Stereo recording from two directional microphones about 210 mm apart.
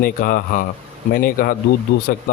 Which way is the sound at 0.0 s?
40° left (ahead or behind).